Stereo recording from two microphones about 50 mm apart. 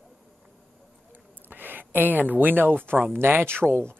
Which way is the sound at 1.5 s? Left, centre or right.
Right.